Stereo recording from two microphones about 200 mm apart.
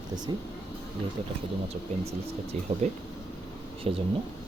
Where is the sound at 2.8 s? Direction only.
35° right (ahead or behind).